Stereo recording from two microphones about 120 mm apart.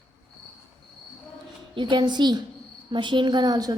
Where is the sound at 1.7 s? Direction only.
40° right (ahead or behind).